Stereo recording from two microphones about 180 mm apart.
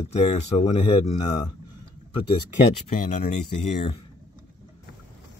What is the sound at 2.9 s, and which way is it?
Speech, 45° left (ahead or behind).